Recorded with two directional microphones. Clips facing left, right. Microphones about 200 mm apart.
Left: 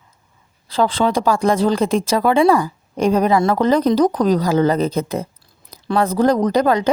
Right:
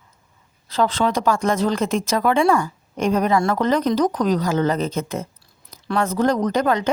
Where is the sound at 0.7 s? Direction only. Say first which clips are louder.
Left 3 dB; 30° left (ahead or behind).